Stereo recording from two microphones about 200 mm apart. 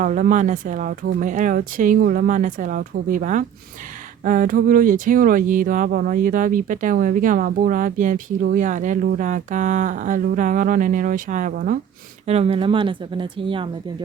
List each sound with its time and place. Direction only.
0.0 s speech: 40° right (ahead or behind)
12.2 s speech: 30° right (ahead or behind)